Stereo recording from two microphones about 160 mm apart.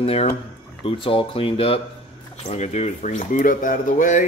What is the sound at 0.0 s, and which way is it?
Speech, 40° left (ahead or behind).